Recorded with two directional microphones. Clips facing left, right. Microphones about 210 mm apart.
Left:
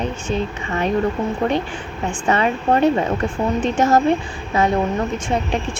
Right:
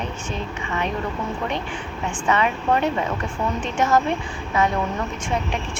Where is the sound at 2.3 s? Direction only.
35° left (ahead or behind).